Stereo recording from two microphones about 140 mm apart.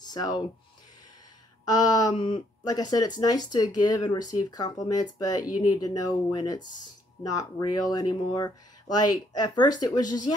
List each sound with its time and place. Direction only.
0.1 s speech: 30° left (ahead or behind)
1.7 s speech: 30° left (ahead or behind)